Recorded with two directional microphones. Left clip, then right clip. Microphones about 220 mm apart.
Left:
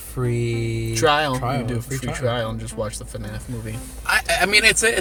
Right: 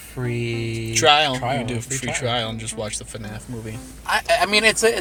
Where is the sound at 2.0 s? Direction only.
15° right (ahead or behind).